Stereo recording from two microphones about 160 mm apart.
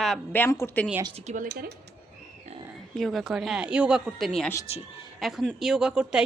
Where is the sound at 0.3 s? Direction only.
15° left (ahead or behind).